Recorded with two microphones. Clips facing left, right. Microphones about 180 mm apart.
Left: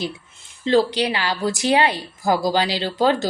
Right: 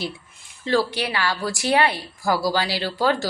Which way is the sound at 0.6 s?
20° left (ahead or behind).